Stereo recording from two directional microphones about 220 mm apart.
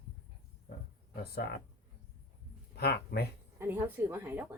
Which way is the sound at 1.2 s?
45° left (ahead or behind).